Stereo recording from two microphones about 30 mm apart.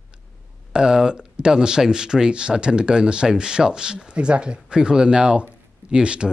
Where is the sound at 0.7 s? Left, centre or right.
Right.